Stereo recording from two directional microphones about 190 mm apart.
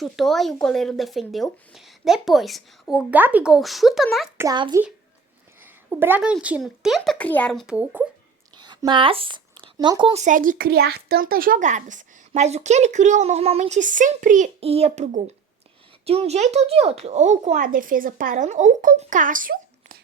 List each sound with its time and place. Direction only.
0.0 s speech: centre (ahead or behind)
4.4 s a child's voice: 20° right (ahead or behind)
5.6 s speech: 10° right (ahead or behind)
8.5 s speech: 20° right (ahead or behind); by 20.0 s 45° right (ahead or behind)